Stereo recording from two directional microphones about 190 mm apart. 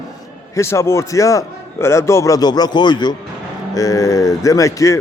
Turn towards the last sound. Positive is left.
turn(degrees=15)  # may be behind; listen again after turning